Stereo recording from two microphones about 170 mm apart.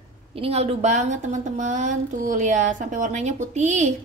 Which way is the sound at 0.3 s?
35° right (ahead or behind).